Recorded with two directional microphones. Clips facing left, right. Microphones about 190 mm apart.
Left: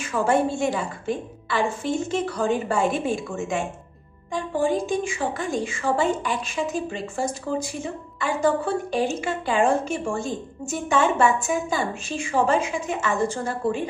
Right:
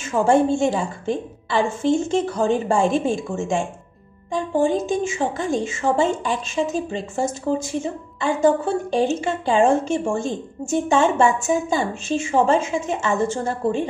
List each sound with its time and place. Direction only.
0.0 s a woman's voice: 25° right (ahead or behind)